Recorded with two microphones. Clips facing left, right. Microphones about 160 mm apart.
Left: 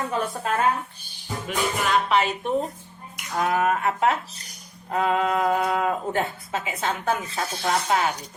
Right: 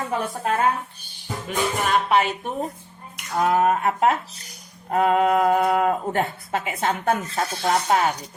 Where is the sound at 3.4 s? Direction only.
35° right (ahead or behind); by 7.4 s 55° right (ahead or behind).